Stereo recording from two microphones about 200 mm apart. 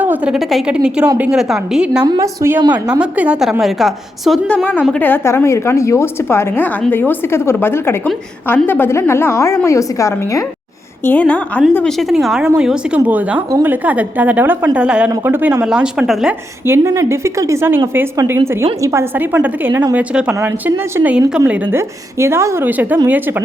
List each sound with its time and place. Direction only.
0.0 s a woman's voice: 5° right (ahead or behind)
2.0 s a woman's voice: 15° right (ahead or behind)
3.0 s a woman's voice: 5° right (ahead or behind)